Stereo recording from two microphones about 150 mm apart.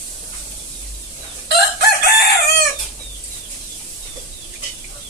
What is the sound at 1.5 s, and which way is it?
Chicken, 90° left.